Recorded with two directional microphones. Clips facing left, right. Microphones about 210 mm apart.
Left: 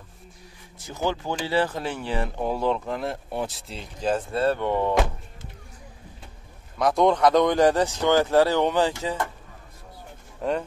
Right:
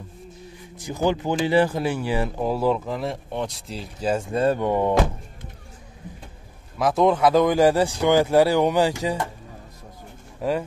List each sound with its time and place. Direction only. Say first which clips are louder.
0.7 s speech: right 5 dB; 15° right (ahead or behind)
6.8 s speech: right 1 dB; 5° right (ahead or behind)
10.4 s speech: right 2 dB; 5° right (ahead or behind)